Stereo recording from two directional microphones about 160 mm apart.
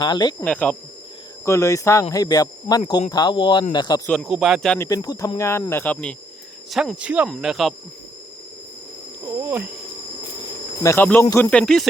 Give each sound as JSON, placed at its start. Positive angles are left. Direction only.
{"t": 0.0, "sound": "speech", "side_deg": 25}
{"t": 0.4, "sound": "speech", "side_deg": 10}
{"t": 1.5, "sound": "speech", "side_deg": 20}
{"t": 4.1, "sound": "speech", "side_deg": 0}
{"t": 4.8, "sound": "speech", "side_deg": 20}
{"t": 9.2, "sound": "cricket", "side_deg": -15}
{"t": 10.8, "sound": "speech", "side_deg": 15}
{"t": 11.5, "sound": "speech", "side_deg": 5}